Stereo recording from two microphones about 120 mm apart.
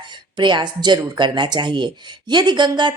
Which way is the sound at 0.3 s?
40° right (ahead or behind).